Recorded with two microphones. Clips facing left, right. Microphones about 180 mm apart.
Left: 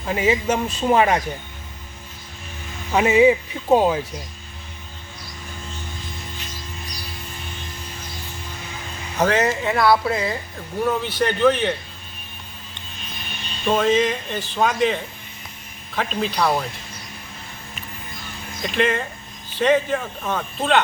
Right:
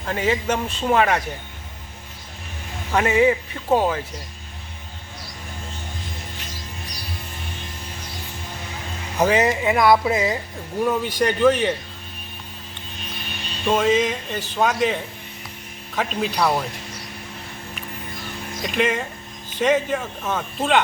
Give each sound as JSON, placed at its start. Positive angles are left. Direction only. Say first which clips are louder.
{"t": 0.0, "sound": "speech", "louder": "left 2 dB", "side_deg": 10}
{"t": 2.9, "sound": "speech", "louder": "left 3 dB", "side_deg": 15}
{"t": 9.1, "sound": "speech", "louder": "right 1 dB", "side_deg": -10}
{"t": 13.7, "sound": "speech", "louder": "even", "side_deg": -5}
{"t": 16.0, "sound": "speech", "louder": "even", "side_deg": -5}
{"t": 18.6, "sound": "speech", "louder": "left 1 dB", "side_deg": -5}